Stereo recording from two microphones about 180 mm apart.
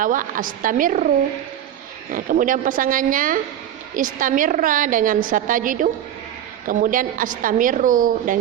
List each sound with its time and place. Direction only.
0.0 s a woman's voice: 50° right (ahead or behind)
2.1 s a woman's voice: 50° right (ahead or behind)